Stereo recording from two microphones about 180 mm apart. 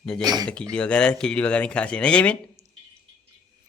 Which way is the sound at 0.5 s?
5° left (ahead or behind).